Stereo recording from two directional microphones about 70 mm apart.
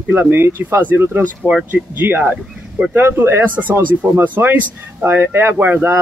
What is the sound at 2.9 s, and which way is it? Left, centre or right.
Speech, right.